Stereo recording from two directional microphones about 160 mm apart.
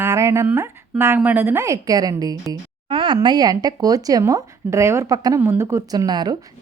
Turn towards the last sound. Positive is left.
turn(degrees=-25)  # may be behind; listen again after turning